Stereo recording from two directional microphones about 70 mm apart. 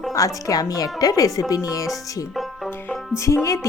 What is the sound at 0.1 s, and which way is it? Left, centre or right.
Speech, left.